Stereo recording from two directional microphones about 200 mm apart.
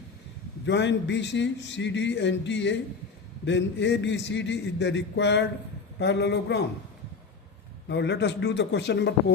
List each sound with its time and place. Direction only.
0.6 s a man's voice: 60° left (ahead or behind)
7.9 s a man's voice: 60° left (ahead or behind)